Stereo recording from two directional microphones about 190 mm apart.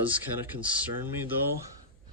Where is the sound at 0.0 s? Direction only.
10° right (ahead or behind).